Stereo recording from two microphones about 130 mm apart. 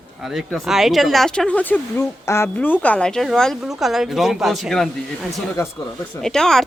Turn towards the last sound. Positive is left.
turn(degrees=5)  # may be behind; listen again after turning